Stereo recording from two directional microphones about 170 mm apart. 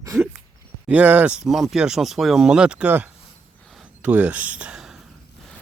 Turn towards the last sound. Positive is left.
turn(degrees=-5)  # may be behind; listen again after turning